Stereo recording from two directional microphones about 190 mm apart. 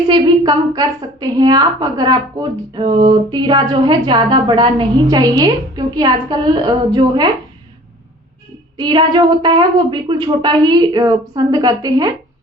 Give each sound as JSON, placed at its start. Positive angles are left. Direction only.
{"t": 0.1, "sound": "a woman's voice", "side_deg": -20}
{"t": 8.8, "sound": "a woman's voice", "side_deg": -25}